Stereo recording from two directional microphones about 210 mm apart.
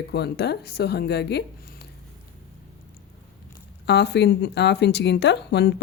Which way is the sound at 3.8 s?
55° left (ahead or behind).